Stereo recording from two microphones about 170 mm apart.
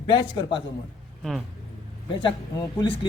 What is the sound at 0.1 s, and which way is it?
Speech, 30° left (ahead or behind).